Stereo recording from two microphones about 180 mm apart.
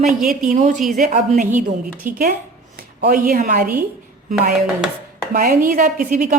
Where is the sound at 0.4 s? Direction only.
45° right (ahead or behind).